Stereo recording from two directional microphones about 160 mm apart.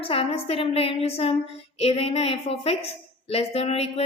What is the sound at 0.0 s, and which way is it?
A woman's voice, 35° left (ahead or behind).